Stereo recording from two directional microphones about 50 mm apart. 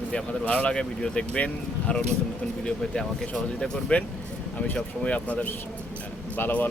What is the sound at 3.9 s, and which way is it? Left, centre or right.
Speech, left.